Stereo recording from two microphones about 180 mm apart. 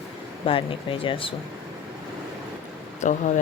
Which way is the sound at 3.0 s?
45° left (ahead or behind).